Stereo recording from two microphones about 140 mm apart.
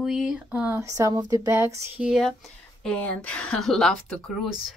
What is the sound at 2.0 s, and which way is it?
Speech, 5° right (ahead or behind).